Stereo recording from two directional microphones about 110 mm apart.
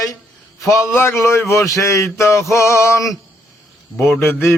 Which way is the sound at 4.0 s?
20° left (ahead or behind).